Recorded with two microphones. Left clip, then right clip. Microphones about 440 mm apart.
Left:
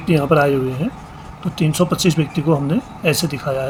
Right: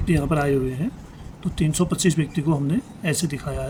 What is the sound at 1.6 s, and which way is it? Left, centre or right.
Speech, right.